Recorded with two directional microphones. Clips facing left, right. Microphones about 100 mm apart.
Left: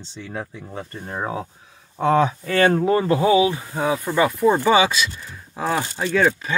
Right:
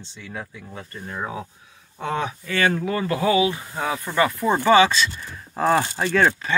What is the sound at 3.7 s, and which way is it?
Speech, 15° left (ahead or behind).